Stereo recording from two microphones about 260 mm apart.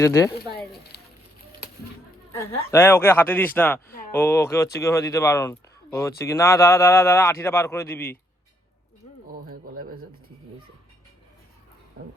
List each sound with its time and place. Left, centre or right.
0.0 s speech: centre
0.9 s a sound: left
2.7 s speech: centre
9.3 s speech: right